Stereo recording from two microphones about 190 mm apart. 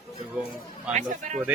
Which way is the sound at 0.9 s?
40° right (ahead or behind).